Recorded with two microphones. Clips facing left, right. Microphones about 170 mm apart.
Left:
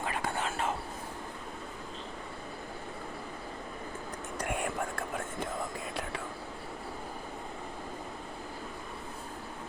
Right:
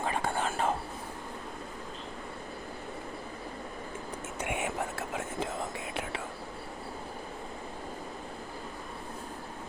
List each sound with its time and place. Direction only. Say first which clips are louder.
0.2 s whispering: right 3 dB; 30° right (ahead or behind)
4.4 s whispering: even; 5° right (ahead or behind)